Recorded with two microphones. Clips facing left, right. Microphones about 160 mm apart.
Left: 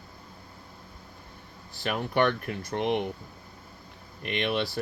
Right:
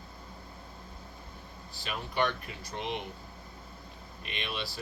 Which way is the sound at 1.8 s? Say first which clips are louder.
Left 6 dB; 55° left (ahead or behind).